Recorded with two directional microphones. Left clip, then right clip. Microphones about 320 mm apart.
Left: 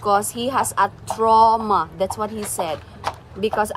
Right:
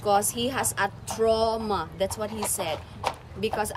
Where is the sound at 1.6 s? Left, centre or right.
Centre.